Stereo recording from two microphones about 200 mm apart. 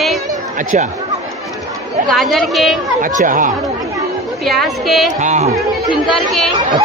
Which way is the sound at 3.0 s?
40° right (ahead or behind).